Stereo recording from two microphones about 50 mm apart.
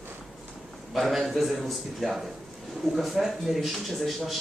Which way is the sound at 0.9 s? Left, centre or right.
Centre.